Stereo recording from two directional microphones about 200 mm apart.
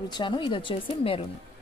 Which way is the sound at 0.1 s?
25° left (ahead or behind).